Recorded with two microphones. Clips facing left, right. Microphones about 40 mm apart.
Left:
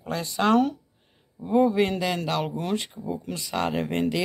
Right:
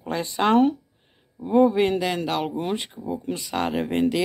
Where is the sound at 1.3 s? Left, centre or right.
Centre.